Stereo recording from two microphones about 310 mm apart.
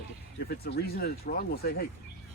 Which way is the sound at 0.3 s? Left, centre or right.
Left.